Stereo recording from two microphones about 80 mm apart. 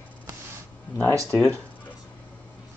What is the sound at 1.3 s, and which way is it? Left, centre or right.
Speech, left.